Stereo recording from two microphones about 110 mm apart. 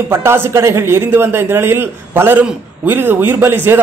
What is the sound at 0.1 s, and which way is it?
A man's voice, 20° right (ahead or behind).